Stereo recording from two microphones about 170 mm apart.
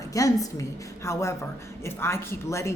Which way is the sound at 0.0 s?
20° left (ahead or behind).